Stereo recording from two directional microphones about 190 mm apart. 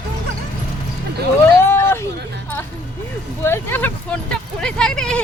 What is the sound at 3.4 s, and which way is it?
Speech, 10° left (ahead or behind).